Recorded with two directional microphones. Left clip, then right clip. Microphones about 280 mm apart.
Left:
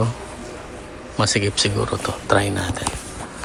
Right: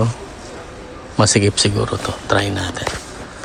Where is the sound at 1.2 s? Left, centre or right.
Centre.